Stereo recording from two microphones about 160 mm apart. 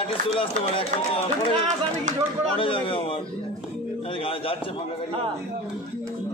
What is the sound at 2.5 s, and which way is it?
Speech, 35° left (ahead or behind).